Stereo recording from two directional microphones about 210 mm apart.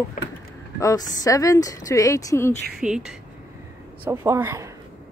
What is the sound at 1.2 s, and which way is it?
A woman's voice, 15° left (ahead or behind).